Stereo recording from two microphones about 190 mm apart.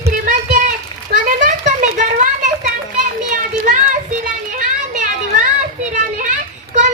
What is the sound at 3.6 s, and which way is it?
Children playing, 40° right (ahead or behind).